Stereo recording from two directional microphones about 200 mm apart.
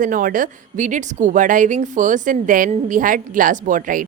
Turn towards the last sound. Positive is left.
turn(degrees=-40)  # may be behind; listen again after turning